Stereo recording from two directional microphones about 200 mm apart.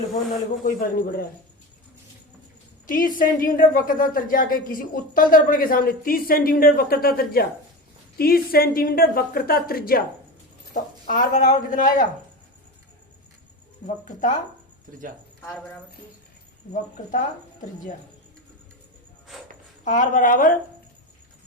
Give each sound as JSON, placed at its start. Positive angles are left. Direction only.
{"t": 0.6, "sound": "a woman's voice", "side_deg": 50}
{"t": 2.8, "sound": "a woman's voice", "side_deg": 45}
{"t": 13.8, "sound": "speech", "side_deg": 40}
{"t": 16.7, "sound": "speech", "side_deg": 40}
{"t": 19.8, "sound": "a woman's voice", "side_deg": 40}